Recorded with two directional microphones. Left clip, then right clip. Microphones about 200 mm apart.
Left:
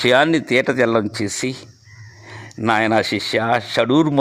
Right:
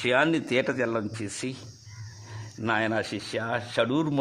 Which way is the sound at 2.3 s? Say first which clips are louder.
Left 10 dB; 25° left (ahead or behind).